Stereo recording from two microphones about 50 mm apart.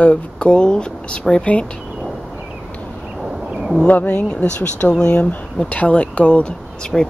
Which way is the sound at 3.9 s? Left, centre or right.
Left.